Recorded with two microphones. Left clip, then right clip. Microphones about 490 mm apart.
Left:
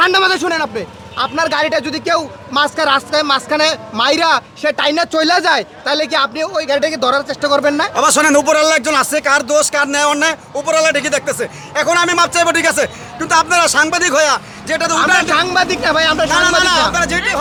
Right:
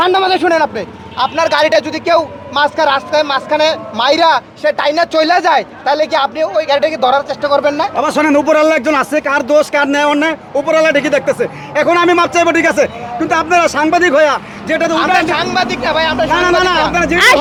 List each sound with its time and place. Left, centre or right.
0.0 s a man's voice: left
8.4 s a man's voice: centre; by 16.3 s left
16.7 s speech: centre